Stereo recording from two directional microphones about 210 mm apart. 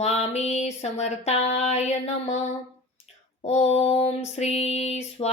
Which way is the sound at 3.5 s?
30° left (ahead or behind).